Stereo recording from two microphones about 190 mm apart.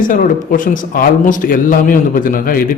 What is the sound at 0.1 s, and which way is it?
Speech, 45° left (ahead or behind).